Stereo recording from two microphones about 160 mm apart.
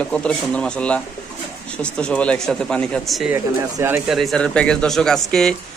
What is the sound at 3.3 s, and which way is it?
Speech, 15° right (ahead or behind).